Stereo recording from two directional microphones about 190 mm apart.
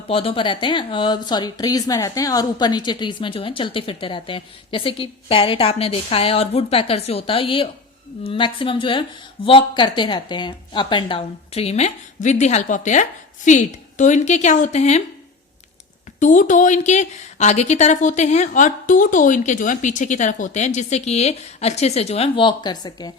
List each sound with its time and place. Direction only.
0.1 s speech: 30° left (ahead or behind)
16.2 s speech: 40° left (ahead or behind); by 23.1 s 20° left (ahead or behind)